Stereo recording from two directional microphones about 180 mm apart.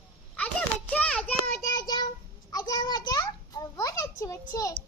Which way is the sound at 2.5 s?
20° left (ahead or behind).